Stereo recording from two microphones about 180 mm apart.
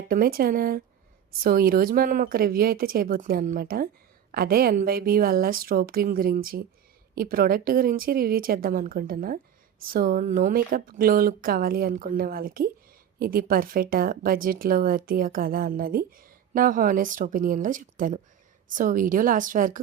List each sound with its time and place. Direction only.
0.1 s a woman's voice: 55° right (ahead or behind)